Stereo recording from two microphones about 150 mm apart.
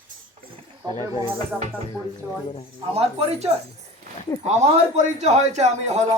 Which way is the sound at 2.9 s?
40° right (ahead or behind).